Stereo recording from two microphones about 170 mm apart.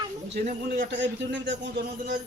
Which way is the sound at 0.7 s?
85° right.